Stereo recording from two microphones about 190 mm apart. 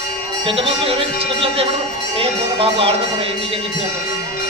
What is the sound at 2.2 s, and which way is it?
Speech, 30° right (ahead or behind).